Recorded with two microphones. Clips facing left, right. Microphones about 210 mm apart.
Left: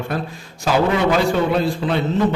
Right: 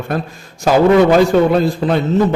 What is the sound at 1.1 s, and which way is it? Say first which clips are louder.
Speech: right 6 dB; 45° right (ahead or behind).